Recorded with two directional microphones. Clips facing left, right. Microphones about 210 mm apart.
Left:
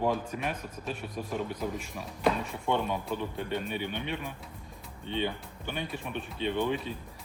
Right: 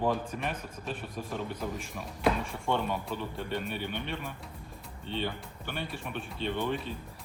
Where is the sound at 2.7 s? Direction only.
15° left (ahead or behind).